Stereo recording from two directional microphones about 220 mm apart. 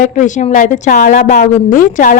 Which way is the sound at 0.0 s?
35° left (ahead or behind).